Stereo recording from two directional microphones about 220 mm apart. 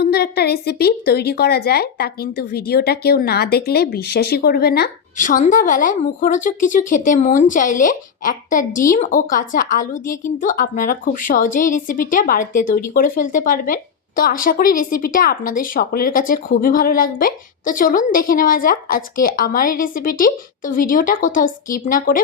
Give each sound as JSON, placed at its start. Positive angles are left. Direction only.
{"t": 0.0, "sound": "a woman's voice", "side_deg": 45}